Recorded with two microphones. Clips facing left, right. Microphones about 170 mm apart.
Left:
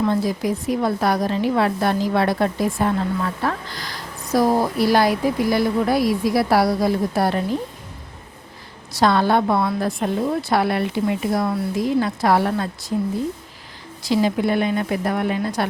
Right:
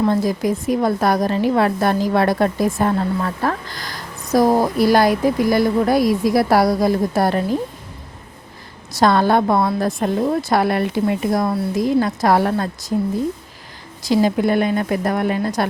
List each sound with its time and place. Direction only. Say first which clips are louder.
0.0 s a woman's voice: right 3 dB; 45° right (ahead or behind)
8.9 s a woman's voice: right 2 dB; 45° right (ahead or behind)
14.0 s a woman's voice: right 3 dB; 45° right (ahead or behind)